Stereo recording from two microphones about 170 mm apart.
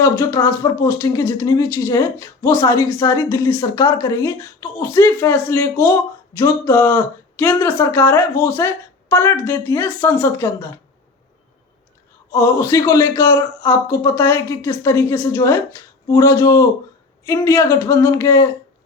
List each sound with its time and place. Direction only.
0.0 s speech: 15° left (ahead or behind)
12.3 s speech: 15° left (ahead or behind)